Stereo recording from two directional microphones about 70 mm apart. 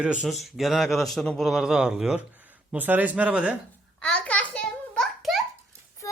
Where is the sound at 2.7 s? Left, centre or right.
Right.